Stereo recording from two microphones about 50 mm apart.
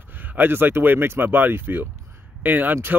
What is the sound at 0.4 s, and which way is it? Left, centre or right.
Speech, right.